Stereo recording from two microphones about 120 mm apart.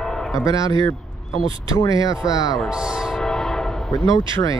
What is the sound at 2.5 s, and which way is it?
Train horn, 5° right (ahead or behind).